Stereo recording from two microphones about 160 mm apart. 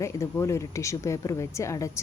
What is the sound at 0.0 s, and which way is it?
A woman's voice, 20° left (ahead or behind).